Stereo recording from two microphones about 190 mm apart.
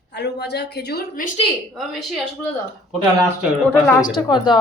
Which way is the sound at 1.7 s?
Centre (ahead or behind).